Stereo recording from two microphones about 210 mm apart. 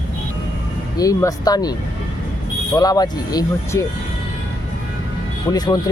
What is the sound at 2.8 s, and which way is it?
Speech, 20° left (ahead or behind).